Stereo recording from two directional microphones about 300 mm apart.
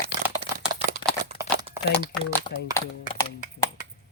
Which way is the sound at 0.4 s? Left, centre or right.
Centre.